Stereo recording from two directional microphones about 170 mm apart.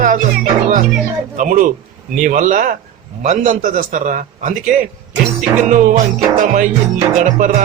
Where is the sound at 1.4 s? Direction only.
50° right (ahead or behind).